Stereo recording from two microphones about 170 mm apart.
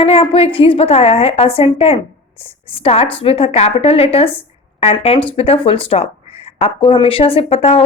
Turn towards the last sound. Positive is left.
turn(degrees=35)  # may be behind; listen again after turning